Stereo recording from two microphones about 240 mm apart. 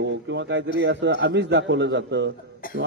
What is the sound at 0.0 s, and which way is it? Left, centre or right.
A man's voice, right.